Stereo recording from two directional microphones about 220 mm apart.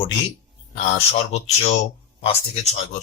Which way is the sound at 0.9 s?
30° left (ahead or behind).